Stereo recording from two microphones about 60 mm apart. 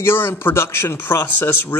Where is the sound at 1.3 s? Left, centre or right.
Left.